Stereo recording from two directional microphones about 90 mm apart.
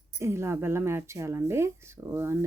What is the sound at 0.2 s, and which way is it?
Speech, 30° right (ahead or behind).